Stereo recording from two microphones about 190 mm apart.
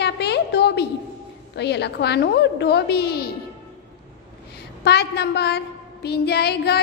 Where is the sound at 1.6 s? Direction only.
60° left (ahead or behind).